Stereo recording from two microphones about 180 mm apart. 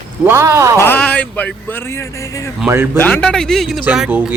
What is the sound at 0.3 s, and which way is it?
Speech, 15° right (ahead or behind).